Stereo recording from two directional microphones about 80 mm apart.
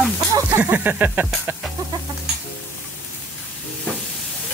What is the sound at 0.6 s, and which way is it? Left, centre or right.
Snake, right.